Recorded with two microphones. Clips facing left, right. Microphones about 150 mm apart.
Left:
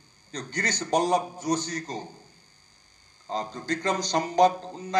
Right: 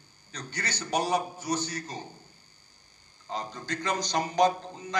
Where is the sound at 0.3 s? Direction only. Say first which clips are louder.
Left 5 dB; 40° left (ahead or behind).